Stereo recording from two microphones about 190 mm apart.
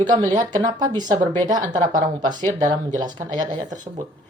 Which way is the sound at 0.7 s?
20° right (ahead or behind).